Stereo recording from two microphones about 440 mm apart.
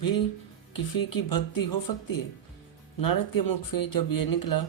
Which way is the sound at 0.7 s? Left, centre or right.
Left.